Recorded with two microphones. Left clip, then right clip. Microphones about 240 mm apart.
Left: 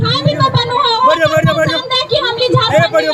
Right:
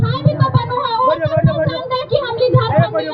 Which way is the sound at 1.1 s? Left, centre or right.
Left.